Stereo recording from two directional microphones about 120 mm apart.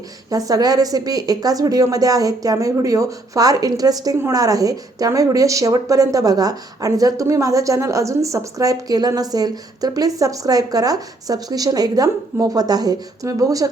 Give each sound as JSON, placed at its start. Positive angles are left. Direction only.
{"t": 0.3, "sound": "a woman's voice", "side_deg": -30}